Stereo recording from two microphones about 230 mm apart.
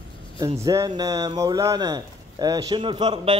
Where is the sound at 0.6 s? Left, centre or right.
Centre.